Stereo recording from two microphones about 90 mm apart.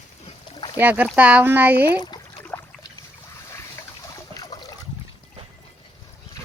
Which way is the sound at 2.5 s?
20° left (ahead or behind).